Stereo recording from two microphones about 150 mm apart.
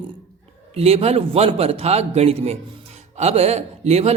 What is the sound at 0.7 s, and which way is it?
Speech, 45° right (ahead or behind).